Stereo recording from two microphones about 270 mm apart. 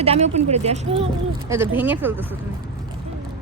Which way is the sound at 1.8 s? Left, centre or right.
Centre.